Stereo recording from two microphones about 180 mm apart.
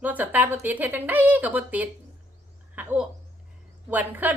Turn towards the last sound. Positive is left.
turn(degrees=-10)  # may be behind; listen again after turning